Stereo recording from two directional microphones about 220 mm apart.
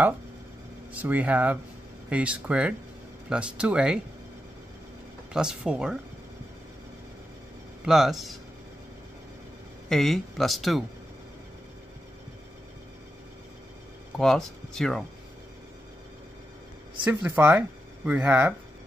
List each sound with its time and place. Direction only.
0.9 s speech: 5° right (ahead or behind)
5.3 s speech: 5° right (ahead or behind)
7.8 s speech: centre (ahead or behind)
9.8 s speech: centre (ahead or behind)
14.1 s speech: centre (ahead or behind)
17.0 s speech: 5° right (ahead or behind)